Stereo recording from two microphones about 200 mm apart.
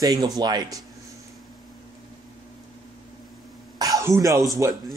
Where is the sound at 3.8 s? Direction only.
15° right (ahead or behind).